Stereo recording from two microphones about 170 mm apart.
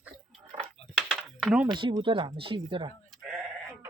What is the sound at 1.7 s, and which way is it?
Speech, 30° right (ahead or behind).